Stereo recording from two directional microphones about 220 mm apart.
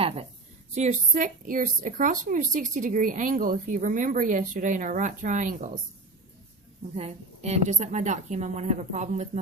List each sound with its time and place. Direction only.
0.7 s a woman's voice: 30° right (ahead or behind)
6.9 s a woman's voice: 30° right (ahead or behind)